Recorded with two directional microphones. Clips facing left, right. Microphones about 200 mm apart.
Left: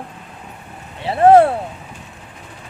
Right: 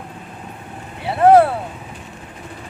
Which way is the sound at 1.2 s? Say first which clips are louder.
Left 1 dB; 30° left (ahead or behind).